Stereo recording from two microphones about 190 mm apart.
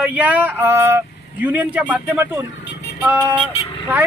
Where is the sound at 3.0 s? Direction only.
10° right (ahead or behind).